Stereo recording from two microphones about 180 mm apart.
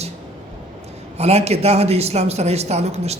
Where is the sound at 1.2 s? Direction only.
35° right (ahead or behind).